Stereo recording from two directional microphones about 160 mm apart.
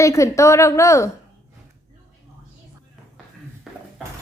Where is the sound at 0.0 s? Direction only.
20° left (ahead or behind).